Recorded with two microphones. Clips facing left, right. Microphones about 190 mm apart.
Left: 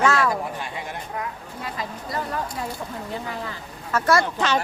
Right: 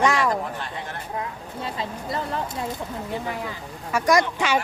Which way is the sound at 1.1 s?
25° right (ahead or behind).